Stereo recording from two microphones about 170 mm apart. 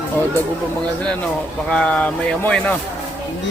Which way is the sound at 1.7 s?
5° left (ahead or behind).